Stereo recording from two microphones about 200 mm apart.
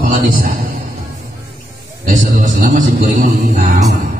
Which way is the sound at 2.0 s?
40° right (ahead or behind).